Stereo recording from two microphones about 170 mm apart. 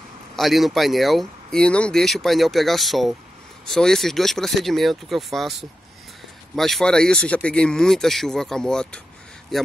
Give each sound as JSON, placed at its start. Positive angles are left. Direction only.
{"t": 0.4, "sound": "speech", "side_deg": 0}